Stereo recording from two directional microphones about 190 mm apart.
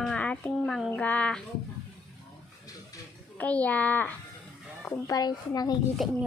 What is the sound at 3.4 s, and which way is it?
Speech, 10° left (ahead or behind).